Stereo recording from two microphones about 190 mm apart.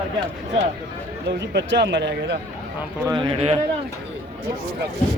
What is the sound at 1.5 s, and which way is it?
Speech, 65° right (ahead or behind).